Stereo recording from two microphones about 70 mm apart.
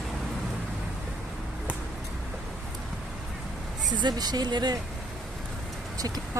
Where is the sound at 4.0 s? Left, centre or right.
Right.